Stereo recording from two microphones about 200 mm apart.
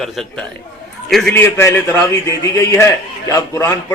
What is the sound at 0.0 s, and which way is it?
A man's voice, centre (ahead or behind).